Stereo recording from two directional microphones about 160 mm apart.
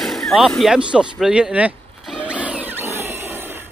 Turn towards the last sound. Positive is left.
turn(degrees=-15)  # may be behind; listen again after turning